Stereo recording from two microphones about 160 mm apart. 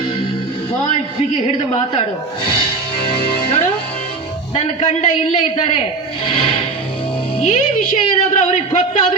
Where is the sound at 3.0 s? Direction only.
35° left (ahead or behind).